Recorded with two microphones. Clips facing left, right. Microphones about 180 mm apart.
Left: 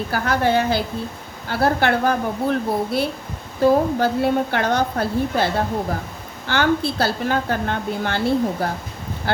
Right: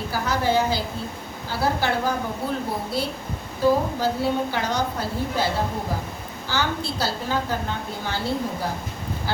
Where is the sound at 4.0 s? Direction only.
60° left (ahead or behind).